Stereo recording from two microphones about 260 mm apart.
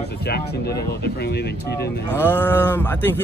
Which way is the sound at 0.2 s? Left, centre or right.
Left.